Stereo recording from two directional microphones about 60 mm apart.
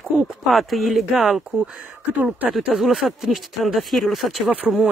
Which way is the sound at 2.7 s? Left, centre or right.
Centre.